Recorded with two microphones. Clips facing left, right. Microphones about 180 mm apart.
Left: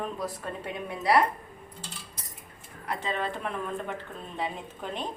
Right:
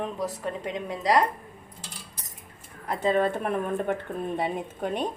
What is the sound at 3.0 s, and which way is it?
Speech, 50° right (ahead or behind).